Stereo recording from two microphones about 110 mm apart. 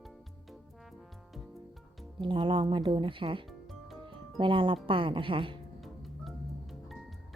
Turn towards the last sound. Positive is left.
turn(degrees=0)  # may be behind; listen again after turning